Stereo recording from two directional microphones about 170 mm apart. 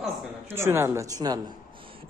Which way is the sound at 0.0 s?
15° right (ahead or behind).